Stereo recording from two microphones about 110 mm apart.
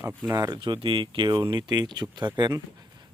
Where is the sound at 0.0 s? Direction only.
20° right (ahead or behind); by 2.6 s 45° right (ahead or behind).